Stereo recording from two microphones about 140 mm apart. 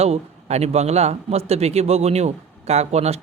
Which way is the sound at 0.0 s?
50° right (ahead or behind).